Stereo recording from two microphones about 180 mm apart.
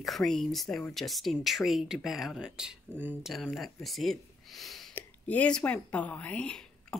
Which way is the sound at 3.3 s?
Centre (ahead or behind).